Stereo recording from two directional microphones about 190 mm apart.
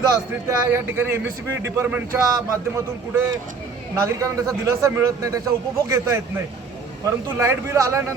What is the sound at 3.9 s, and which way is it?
A man's voice, 15° right (ahead or behind).